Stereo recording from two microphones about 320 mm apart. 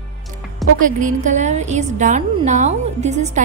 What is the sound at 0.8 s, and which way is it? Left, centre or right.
A woman's voice, right.